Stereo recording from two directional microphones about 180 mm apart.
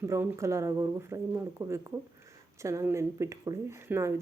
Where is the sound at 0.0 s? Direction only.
15° right (ahead or behind).